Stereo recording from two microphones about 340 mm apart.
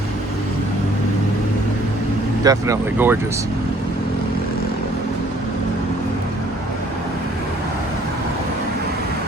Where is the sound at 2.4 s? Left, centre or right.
Centre.